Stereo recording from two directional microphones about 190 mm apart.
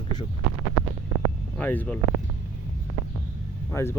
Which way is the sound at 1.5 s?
10° left (ahead or behind).